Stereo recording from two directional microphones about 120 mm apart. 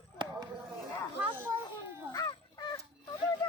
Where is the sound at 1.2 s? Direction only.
15° right (ahead or behind).